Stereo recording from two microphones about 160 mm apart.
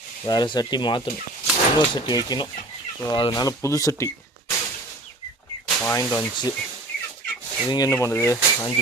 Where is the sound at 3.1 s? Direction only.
30° left (ahead or behind).